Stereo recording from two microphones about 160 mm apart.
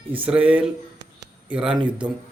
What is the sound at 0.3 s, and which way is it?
Speech, 5° right (ahead or behind).